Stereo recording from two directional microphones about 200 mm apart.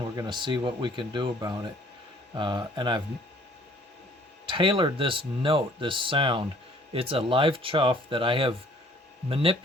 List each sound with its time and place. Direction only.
0.0 s speech: 20° right (ahead or behind)
4.4 s speech: 25° right (ahead or behind)